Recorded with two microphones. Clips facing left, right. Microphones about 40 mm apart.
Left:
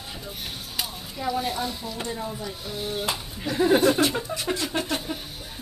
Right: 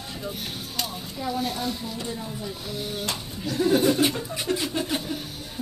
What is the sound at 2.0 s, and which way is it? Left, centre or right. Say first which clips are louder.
Speech: left 1 dB; centre.